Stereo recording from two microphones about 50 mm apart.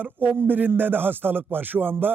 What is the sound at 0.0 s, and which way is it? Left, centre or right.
A man's voice, right.